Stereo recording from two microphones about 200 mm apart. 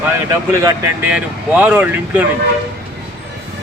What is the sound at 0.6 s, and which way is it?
Speech, 10° right (ahead or behind).